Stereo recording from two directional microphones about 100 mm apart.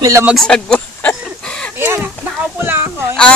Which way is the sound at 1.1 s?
10° left (ahead or behind).